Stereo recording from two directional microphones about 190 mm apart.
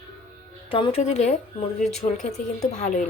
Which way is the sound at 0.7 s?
30° left (ahead or behind).